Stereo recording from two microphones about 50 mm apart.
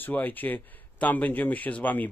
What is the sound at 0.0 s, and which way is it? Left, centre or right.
A man's voice, left.